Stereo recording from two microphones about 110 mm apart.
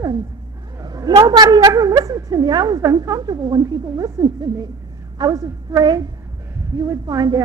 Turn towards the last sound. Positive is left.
turn(degrees=-35)  # may be behind; listen again after turning